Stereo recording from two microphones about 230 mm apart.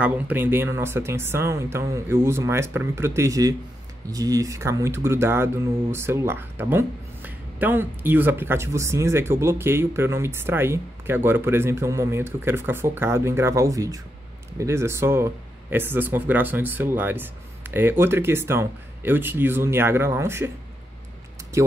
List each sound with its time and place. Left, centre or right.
0.0 s speech: centre